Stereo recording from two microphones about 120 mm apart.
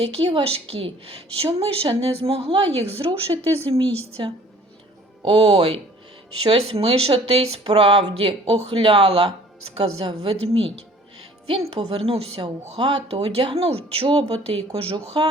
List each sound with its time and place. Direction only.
0.0 s speech: 55° right (ahead or behind)